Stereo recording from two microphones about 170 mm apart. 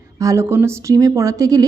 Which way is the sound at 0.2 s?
15° right (ahead or behind).